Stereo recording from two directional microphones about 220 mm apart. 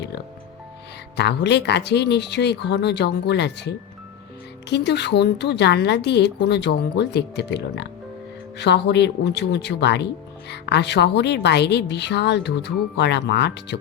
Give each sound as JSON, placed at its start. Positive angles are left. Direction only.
{"t": 1.1, "sound": "a woman's voice", "side_deg": 50}